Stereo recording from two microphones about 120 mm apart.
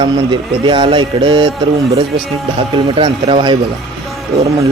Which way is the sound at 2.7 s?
45° right (ahead or behind).